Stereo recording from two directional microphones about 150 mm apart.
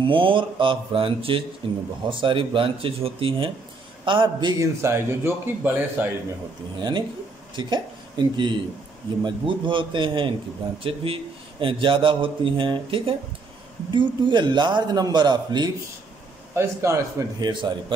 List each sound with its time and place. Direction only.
0.0 s speech: 35° right (ahead or behind)
4.8 s a man's voice: 15° right (ahead or behind)
6.8 s a man's voice: 30° right (ahead or behind)